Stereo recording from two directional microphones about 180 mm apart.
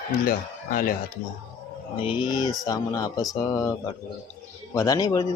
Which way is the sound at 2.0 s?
25° left (ahead or behind).